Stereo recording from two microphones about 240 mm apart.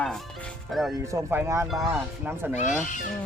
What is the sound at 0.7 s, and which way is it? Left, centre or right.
Speech, centre.